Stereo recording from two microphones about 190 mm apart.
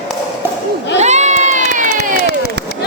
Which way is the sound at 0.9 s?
35° right (ahead or behind).